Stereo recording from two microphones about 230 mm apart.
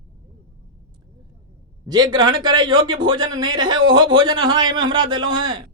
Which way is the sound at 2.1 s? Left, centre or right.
Centre.